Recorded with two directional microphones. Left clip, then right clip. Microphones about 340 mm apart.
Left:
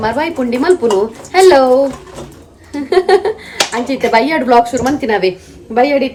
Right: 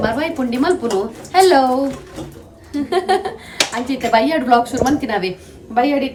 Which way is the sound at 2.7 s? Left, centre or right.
Centre.